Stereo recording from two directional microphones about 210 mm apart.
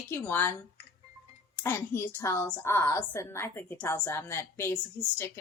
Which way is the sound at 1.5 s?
10° left (ahead or behind).